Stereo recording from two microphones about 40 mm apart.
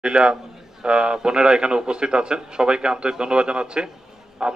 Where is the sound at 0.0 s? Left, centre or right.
Right.